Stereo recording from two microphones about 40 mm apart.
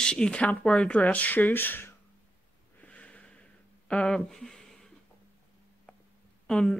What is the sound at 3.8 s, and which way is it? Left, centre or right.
Speech, left.